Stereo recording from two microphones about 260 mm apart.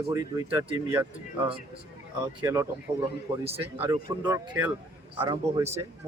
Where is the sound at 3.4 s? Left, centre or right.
Right.